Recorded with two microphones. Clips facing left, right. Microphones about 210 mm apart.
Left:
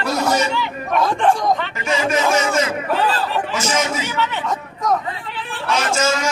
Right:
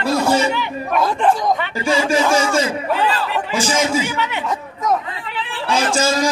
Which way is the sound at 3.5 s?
30° right (ahead or behind).